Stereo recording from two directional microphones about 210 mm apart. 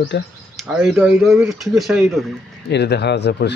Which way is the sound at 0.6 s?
Centre (ahead or behind).